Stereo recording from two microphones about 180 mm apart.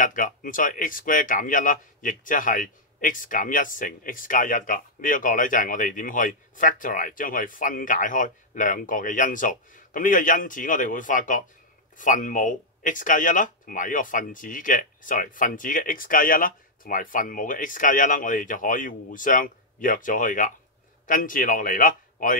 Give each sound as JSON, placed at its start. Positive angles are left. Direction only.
{"t": 0.0, "sound": "speech", "side_deg": 45}